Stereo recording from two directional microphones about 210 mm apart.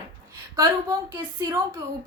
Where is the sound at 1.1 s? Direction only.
15° right (ahead or behind).